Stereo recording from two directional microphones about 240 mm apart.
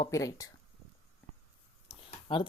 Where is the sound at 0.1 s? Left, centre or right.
Centre.